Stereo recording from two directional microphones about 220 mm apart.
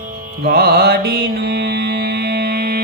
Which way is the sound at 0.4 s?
45° right (ahead or behind).